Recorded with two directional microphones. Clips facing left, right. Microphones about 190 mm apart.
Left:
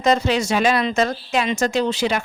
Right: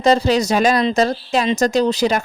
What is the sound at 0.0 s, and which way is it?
A woman's voice, 35° right (ahead or behind).